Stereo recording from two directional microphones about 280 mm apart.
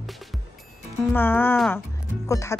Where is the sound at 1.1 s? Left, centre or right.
Centre.